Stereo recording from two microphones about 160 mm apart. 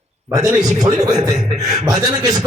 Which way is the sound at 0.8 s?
25° right (ahead or behind).